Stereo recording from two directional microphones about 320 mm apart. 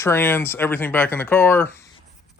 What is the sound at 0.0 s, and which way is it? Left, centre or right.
Speech, centre.